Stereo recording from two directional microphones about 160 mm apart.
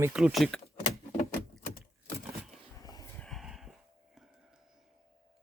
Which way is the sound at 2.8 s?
25° left (ahead or behind).